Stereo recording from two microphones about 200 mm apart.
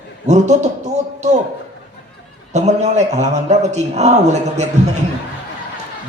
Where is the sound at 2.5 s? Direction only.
35° right (ahead or behind).